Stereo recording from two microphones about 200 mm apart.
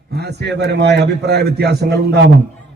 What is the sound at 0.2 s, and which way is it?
A man's voice, 55° right (ahead or behind).